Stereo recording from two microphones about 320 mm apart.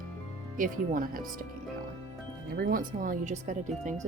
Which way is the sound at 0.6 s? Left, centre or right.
Right.